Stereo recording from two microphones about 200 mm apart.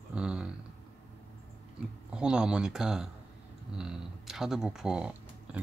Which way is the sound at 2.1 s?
5° right (ahead or behind).